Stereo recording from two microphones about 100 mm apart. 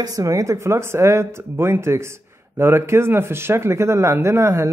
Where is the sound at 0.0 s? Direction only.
35° right (ahead or behind).